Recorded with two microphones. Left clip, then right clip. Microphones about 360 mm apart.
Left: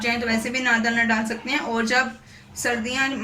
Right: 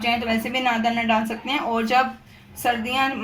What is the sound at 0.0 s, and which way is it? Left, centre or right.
Speech, centre.